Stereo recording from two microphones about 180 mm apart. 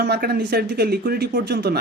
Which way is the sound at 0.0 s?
60° right (ahead or behind).